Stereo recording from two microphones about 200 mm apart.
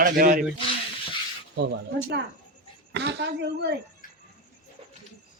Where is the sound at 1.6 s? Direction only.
60° right (ahead or behind).